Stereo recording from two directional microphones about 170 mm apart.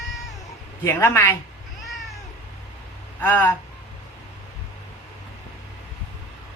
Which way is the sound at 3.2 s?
10° left (ahead or behind).